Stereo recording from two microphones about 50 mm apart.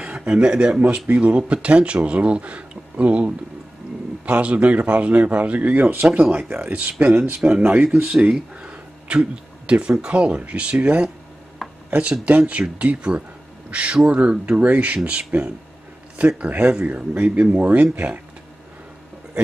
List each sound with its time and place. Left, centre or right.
0.0 s speech: right
7.3 s speech: right
11.6 s a sound: centre
12.3 s speech: right